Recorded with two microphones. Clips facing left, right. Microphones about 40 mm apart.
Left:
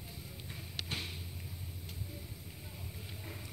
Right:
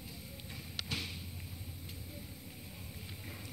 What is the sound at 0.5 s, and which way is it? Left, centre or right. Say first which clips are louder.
Music: even; left.